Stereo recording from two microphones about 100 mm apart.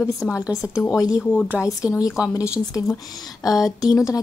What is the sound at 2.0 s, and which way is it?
Speech, 5° right (ahead or behind).